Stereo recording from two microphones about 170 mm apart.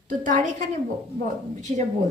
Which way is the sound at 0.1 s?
50° right (ahead or behind).